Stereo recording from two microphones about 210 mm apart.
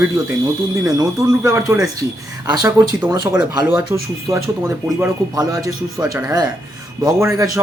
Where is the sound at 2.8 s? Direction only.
15° right (ahead or behind).